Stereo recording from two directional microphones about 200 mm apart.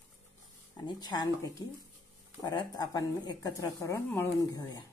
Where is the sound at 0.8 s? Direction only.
20° left (ahead or behind).